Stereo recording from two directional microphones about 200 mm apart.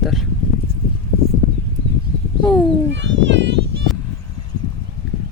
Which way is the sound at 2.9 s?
65° right (ahead or behind).